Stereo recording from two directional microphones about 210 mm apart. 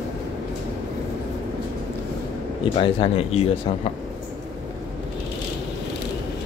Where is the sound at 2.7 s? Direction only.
25° left (ahead or behind).